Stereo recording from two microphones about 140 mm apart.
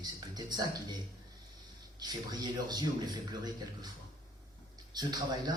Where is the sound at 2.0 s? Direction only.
30° right (ahead or behind).